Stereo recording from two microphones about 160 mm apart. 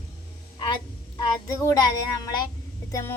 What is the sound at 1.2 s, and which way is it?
A child's voice, 20° left (ahead or behind).